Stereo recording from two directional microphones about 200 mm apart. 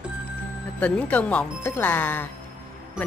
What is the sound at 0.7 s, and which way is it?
Speech, 5° left (ahead or behind).